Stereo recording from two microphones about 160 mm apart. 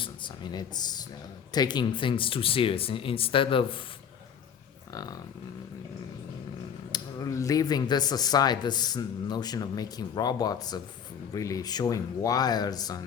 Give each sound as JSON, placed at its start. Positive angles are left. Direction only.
{"t": 1.5, "sound": "speech", "side_deg": 25}
{"t": 6.9, "sound": "speech", "side_deg": 20}